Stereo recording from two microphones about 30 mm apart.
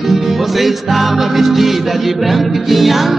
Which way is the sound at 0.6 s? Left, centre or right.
Centre.